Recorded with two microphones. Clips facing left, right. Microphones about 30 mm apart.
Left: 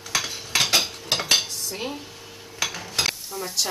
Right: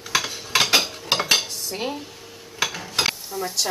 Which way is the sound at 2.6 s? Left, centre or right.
Centre.